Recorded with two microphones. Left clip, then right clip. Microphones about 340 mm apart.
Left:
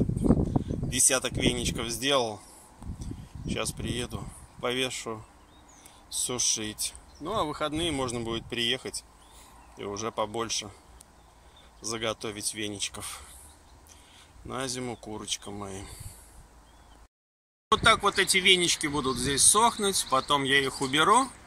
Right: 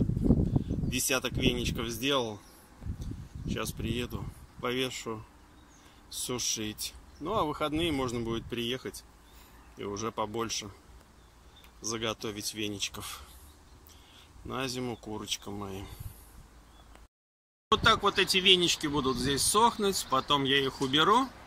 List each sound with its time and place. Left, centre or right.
0.3 s a sound: left
0.8 s speech: centre
3.5 s speech: centre
11.8 s speech: centre
14.5 s speech: centre
17.6 s speech: centre